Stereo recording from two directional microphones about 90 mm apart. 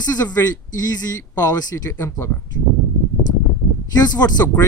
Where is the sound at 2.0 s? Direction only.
30° left (ahead or behind).